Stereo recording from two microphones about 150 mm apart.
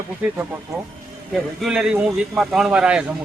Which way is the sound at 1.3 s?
5° right (ahead or behind).